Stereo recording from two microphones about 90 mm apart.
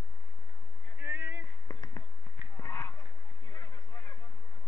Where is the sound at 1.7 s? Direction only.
40° left (ahead or behind).